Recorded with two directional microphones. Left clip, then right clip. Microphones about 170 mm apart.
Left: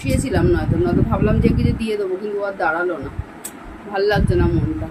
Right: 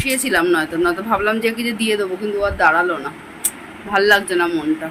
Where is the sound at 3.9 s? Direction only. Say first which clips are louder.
Right 4 dB; 5° right (ahead or behind).